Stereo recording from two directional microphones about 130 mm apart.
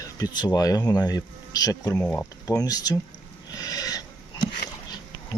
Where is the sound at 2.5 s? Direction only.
30° left (ahead or behind).